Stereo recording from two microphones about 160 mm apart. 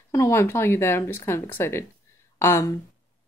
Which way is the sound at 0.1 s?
15° left (ahead or behind).